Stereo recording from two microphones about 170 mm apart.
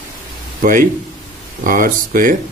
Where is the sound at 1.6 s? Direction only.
55° right (ahead or behind).